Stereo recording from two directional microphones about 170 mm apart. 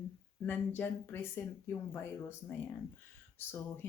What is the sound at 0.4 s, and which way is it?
Speech, 10° left (ahead or behind).